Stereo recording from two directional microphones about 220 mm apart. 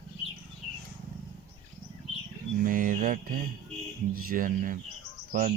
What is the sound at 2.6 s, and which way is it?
Speech, 40° right (ahead or behind).